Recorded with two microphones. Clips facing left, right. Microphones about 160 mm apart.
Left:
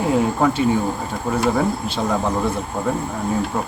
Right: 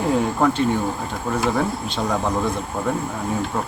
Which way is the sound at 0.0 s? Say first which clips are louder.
Left 1 dB; centre (ahead or behind).